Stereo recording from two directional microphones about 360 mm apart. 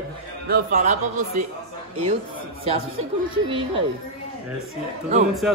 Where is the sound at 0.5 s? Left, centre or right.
Right.